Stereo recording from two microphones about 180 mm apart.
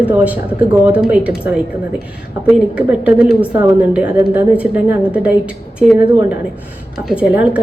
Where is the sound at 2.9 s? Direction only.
5° right (ahead or behind).